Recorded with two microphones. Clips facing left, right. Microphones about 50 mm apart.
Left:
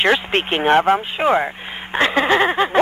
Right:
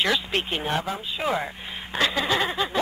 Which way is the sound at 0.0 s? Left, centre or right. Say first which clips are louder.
Left 7 dB; left.